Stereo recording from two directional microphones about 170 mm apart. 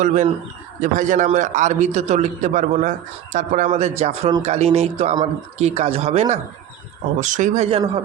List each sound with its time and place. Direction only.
0.0 s a man's voice: 45° right (ahead or behind)